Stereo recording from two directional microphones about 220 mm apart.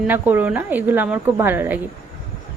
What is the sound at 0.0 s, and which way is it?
A woman's voice, 10° right (ahead or behind).